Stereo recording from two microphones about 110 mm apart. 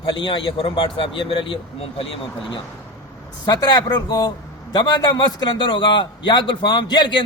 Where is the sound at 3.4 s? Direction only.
35° left (ahead or behind).